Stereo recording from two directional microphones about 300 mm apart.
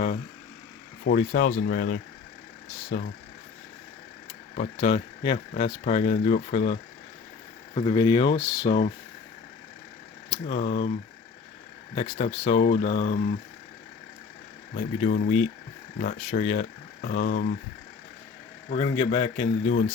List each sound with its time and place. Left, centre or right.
1.0 s speech: left
4.5 s speech: left
7.8 s speech: centre
10.2 s speech: centre
11.9 s speech: left
15.0 s speech: left
18.7 s speech: centre